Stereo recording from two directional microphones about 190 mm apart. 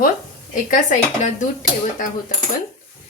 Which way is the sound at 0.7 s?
40° left (ahead or behind).